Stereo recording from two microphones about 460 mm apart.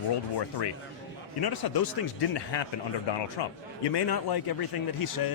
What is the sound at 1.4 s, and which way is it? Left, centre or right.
A man's voice, left.